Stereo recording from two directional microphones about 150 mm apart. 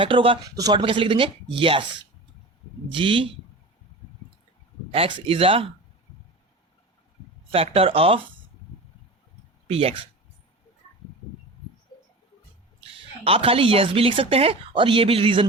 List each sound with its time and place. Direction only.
0.0 s a woman's voice: 35° right (ahead or behind)
2.9 s a woman's voice: 35° right (ahead or behind)
4.9 s a woman's voice: 35° right (ahead or behind)
7.5 s a woman's voice: 40° right (ahead or behind)
9.6 s a woman's voice: 40° right (ahead or behind)
12.8 s a woman's voice: 40° right (ahead or behind)